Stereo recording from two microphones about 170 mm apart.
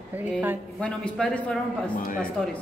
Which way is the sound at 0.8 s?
5° left (ahead or behind).